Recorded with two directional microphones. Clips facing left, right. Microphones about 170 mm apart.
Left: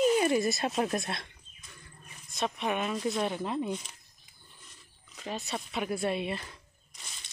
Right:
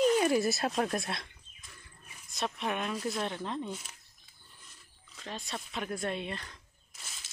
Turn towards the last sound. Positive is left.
turn(degrees=-5)  # may be behind; listen again after turning